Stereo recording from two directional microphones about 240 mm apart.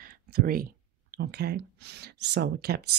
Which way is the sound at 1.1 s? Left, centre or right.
Right.